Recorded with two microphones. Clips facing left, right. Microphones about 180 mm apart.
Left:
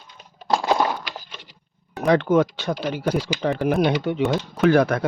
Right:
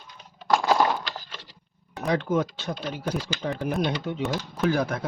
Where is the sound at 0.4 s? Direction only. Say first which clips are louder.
Left 1 dB; 20° left (ahead or behind).